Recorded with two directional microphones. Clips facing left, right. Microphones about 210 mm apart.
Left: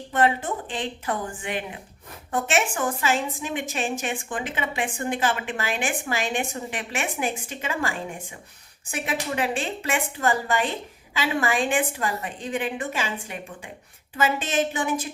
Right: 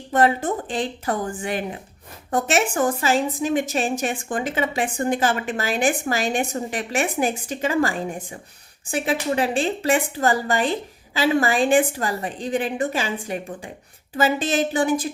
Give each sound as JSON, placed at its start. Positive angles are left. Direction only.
{"t": 0.1, "sound": "a woman's voice", "side_deg": -40}